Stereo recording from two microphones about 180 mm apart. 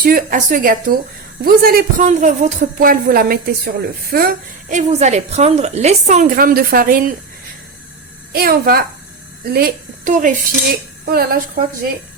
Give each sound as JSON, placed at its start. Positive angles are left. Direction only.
{"t": 0.0, "sound": "a woman's voice", "side_deg": -55}
{"t": 4.9, "sound": "a woman's voice", "side_deg": -40}
{"t": 8.3, "sound": "a woman's voice", "side_deg": -55}
{"t": 11.1, "sound": "a woman's voice", "side_deg": -55}